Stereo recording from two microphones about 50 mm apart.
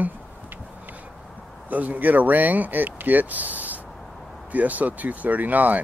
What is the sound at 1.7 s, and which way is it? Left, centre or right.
Speech, right.